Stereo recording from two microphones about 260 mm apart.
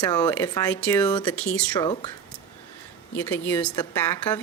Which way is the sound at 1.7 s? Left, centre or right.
Centre.